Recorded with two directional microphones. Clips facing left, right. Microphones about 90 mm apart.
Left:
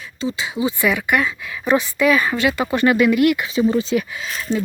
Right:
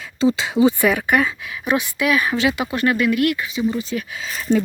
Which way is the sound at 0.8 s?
35° right (ahead or behind).